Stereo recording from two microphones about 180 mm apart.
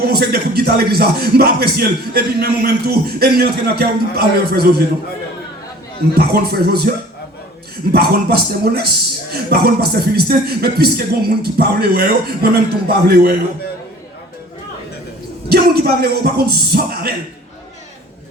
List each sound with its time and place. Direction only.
0.0 s speech: 60° right (ahead or behind)
6.1 s speech: 60° right (ahead or behind)
7.9 s speech: 60° right (ahead or behind)
15.4 s a man's voice: 60° right (ahead or behind)